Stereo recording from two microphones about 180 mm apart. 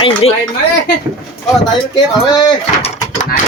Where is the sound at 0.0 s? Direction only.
30° left (ahead or behind).